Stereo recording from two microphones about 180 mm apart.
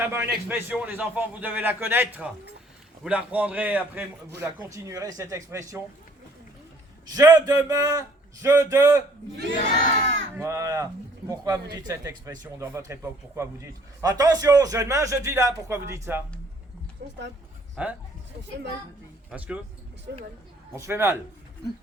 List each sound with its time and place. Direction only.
0.0 s speech: 10° right (ahead or behind)
7.2 s speech: 20° right (ahead or behind)
9.6 s crowd: 40° left (ahead or behind)
10.3 s a man's voice: 15° right (ahead or behind)
17.8 s speech: 5° right (ahead or behind)
19.3 s speech: 5° right (ahead or behind)
20.7 s speech: 15° right (ahead or behind)